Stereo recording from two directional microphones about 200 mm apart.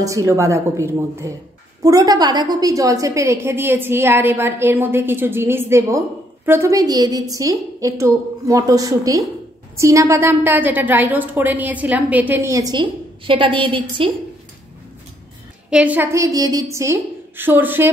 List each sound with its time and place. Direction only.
0.0 s a woman's voice: 15° right (ahead or behind)
15.7 s a woman's voice: 5° right (ahead or behind)